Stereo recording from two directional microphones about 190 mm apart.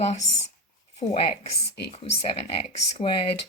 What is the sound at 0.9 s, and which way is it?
Speech, 35° left (ahead or behind).